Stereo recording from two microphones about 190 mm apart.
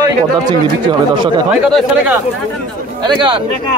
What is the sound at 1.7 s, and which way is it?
Speech, 10° right (ahead or behind).